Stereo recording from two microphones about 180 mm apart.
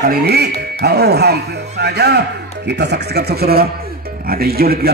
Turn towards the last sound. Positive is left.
turn(degrees=-60)  # may be behind; listen again after turning